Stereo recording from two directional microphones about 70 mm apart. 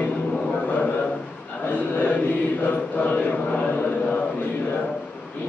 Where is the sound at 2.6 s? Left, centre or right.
Left.